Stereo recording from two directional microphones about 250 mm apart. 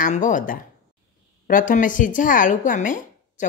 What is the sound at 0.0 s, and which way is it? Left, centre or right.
Speech, left.